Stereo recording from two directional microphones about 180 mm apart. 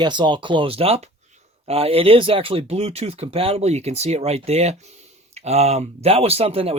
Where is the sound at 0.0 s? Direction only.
25° right (ahead or behind).